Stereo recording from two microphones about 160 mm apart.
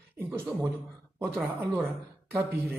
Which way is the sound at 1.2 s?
10° right (ahead or behind).